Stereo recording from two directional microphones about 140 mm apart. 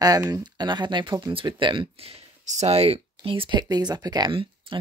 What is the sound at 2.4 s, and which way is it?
Speech, 55° right (ahead or behind).